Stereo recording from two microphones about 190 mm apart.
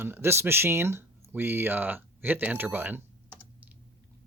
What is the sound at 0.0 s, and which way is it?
Speech, 10° right (ahead or behind).